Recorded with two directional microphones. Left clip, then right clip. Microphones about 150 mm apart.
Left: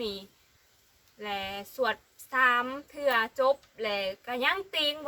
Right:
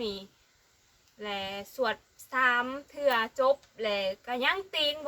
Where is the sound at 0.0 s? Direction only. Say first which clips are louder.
Even; 20° left (ahead or behind).